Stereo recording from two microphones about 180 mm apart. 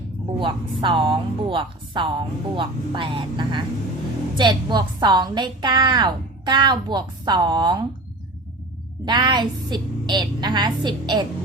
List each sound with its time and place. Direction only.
0.3 s a woman's voice: 25° right (ahead or behind)
9.0 s a woman's voice: 25° right (ahead or behind)